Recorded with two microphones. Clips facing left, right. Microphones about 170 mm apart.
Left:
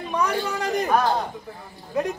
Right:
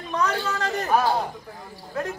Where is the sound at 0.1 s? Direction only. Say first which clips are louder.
Left 1 dB; 10° left (ahead or behind).